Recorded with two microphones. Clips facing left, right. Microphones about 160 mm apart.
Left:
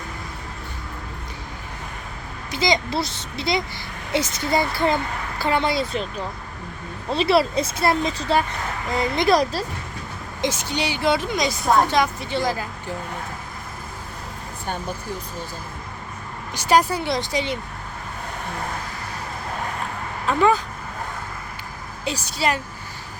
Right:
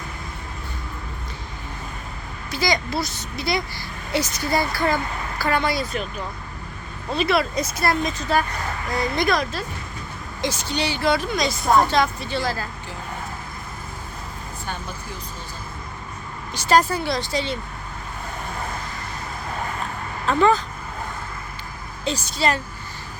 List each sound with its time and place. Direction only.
2.5 s speech: 20° left (ahead or behind)
9.3 s speech: 35° left (ahead or behind)
10.4 s a woman's voice: 20° left (ahead or behind)
16.6 s a woman's voice: 15° left (ahead or behind)
20.2 s a woman's voice: 10° left (ahead or behind)
22.0 s a woman's voice: 10° left (ahead or behind)